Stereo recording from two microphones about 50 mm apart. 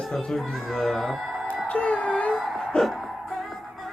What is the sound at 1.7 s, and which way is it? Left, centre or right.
Music, left.